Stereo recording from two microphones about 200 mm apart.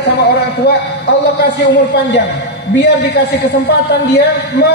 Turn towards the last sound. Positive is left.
turn(degrees=55)  # may be behind; listen again after turning